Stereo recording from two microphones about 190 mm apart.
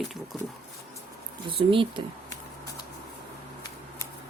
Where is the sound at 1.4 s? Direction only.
25° right (ahead or behind).